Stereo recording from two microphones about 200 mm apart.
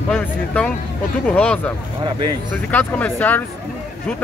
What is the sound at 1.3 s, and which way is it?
Speech, 5° left (ahead or behind).